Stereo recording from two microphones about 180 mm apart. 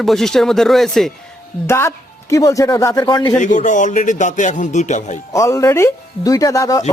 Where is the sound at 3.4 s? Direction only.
45° left (ahead or behind).